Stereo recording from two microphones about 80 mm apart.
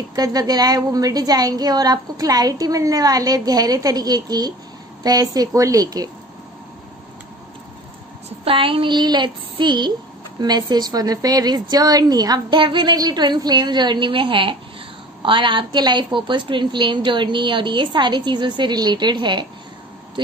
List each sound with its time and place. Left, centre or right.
0.1 s a woman's voice: right
8.5 s child singing: right
10.4 s a woman's voice: right